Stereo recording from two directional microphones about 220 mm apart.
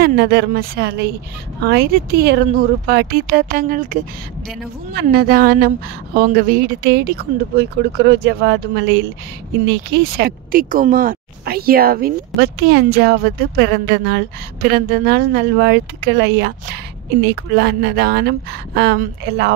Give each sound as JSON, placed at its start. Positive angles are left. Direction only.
{"t": 0.0, "sound": "speech", "side_deg": -45}
{"t": 9.8, "sound": "speech", "side_deg": -45}
{"t": 17.6, "sound": "speech", "side_deg": -50}